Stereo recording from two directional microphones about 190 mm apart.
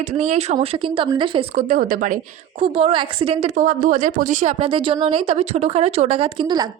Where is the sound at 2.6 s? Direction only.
30° right (ahead or behind).